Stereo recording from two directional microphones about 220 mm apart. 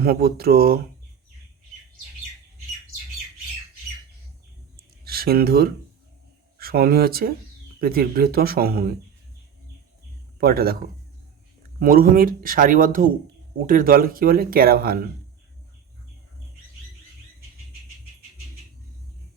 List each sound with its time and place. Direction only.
0.0 s speech: 45° right (ahead or behind)
4.8 s a sound: 45° right (ahead or behind)
6.6 s speech: 45° right (ahead or behind)
10.4 s speech: 45° right (ahead or behind)
11.8 s speech: 40° right (ahead or behind)